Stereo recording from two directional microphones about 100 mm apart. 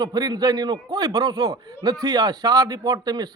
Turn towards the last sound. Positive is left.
turn(degrees=-40)  # may be behind; listen again after turning